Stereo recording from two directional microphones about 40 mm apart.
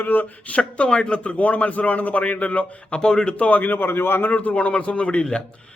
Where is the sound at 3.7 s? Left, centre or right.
Left.